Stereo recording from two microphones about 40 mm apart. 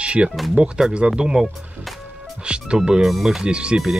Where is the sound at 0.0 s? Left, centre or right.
Right.